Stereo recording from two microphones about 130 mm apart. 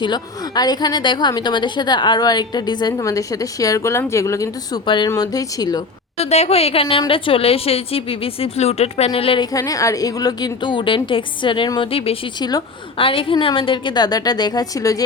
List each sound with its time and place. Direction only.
0.0 s a woman's voice: 30° left (ahead or behind)
6.1 s a woman's voice: 55° left (ahead or behind)
6.8 s a woman's voice: 40° left (ahead or behind)
9.4 s a woman's voice: 25° left (ahead or behind); by 12.1 s 45° left (ahead or behind)
12.4 s a woman's voice: 30° left (ahead or behind)
13.0 s a woman's voice: 45° left (ahead or behind); by 15.0 s 25° left (ahead or behind)